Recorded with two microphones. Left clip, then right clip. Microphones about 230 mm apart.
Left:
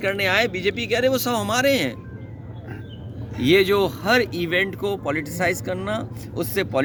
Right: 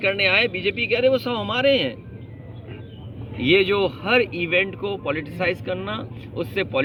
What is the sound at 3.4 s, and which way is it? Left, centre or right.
Speech, centre.